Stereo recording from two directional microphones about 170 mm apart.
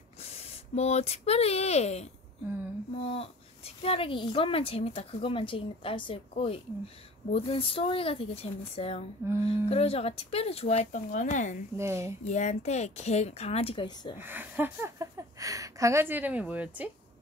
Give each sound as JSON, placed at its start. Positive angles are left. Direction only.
{"t": 0.2, "sound": "a woman's voice", "side_deg": 40}
{"t": 9.2, "sound": "speech", "side_deg": -15}
{"t": 9.7, "sound": "a woman's voice", "side_deg": 35}
{"t": 11.7, "sound": "speech", "side_deg": -15}
{"t": 12.3, "sound": "a woman's voice", "side_deg": 45}
{"t": 14.1, "sound": "speech", "side_deg": -10}